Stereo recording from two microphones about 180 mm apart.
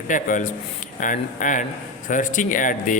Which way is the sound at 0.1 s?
45° left (ahead or behind).